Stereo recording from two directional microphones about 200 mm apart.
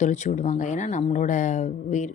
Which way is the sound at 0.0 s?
35° left (ahead or behind).